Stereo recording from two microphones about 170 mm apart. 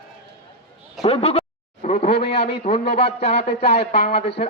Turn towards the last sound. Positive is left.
turn(degrees=35)  # may be behind; listen again after turning